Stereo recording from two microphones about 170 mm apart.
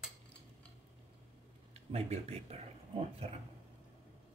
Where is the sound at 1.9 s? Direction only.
35° right (ahead or behind).